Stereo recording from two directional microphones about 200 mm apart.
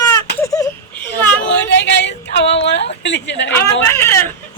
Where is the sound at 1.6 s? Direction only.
60° left (ahead or behind).